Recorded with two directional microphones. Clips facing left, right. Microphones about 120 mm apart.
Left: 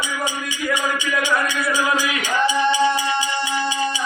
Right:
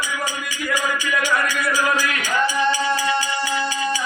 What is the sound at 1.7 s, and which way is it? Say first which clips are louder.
Music: left 1 dB; 25° left (ahead or behind).